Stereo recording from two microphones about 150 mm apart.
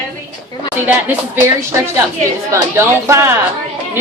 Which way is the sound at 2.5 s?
20° right (ahead or behind).